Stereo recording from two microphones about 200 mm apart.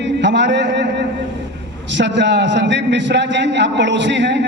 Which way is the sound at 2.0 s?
60° right (ahead or behind).